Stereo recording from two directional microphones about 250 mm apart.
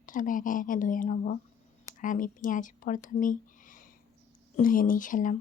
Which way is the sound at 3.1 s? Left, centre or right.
Left.